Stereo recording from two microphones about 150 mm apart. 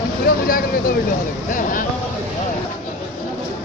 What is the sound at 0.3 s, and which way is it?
Speech, 70° left (ahead or behind).